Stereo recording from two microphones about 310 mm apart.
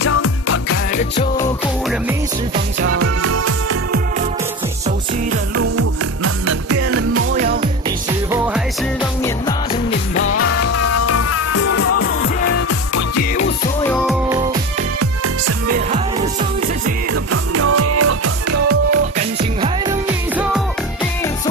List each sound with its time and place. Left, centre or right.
0.0 s music: left
2.8 s music: right
5.6 s music: right
7.3 s music: right
9.2 s music: centre
10.1 s music: left
13.8 s music: centre
15.0 s music: right
15.7 s music: right
17.1 s music: right
18.9 s music: centre